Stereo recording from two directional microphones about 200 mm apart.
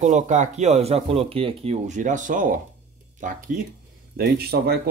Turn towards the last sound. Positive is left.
turn(degrees=-50)  # may be behind; listen again after turning